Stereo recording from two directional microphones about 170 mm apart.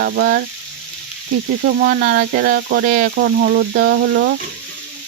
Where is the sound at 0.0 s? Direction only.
65° right (ahead or behind).